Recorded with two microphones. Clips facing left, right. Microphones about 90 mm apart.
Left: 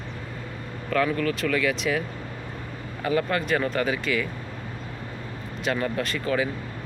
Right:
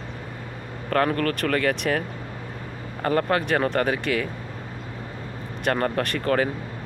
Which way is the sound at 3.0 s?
50° right (ahead or behind).